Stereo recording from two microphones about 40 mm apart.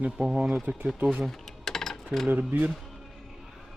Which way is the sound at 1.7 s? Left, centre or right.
Centre.